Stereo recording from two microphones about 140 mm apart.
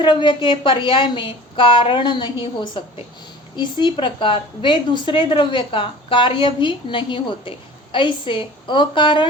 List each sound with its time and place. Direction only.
0.0 s a woman's voice: 35° left (ahead or behind)